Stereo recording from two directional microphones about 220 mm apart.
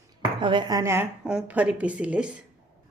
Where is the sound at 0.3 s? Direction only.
20° right (ahead or behind); by 2.3 s 5° right (ahead or behind).